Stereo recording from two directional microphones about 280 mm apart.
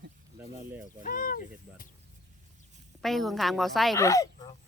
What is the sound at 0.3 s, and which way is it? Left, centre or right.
Speech, centre.